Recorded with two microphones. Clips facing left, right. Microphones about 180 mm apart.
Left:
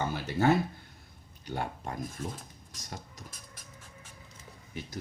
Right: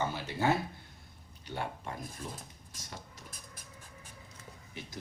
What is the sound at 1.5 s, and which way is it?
Speech, 45° left (ahead or behind).